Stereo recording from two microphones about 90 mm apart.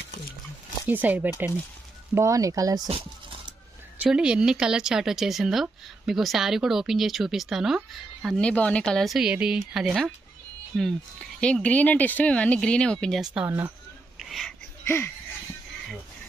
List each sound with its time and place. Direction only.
0.8 s speech: 20° right (ahead or behind)
2.1 s speech: 35° right (ahead or behind)
4.0 s speech: 10° right (ahead or behind)
8.4 s speech: 15° left (ahead or behind)
13.2 s speech: 10° right (ahead or behind)
14.1 s a sound: centre (ahead or behind)